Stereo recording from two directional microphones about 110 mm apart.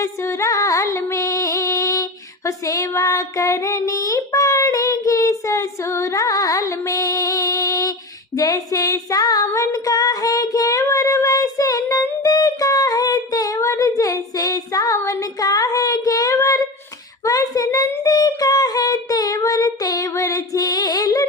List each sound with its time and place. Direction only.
0.0 s music: 25° left (ahead or behind)
8.4 s female singing: 35° left (ahead or behind)
9.5 s child singing: 30° left (ahead or behind)
12.2 s a sound: 35° left (ahead or behind)
17.2 s child singing: 35° left (ahead or behind)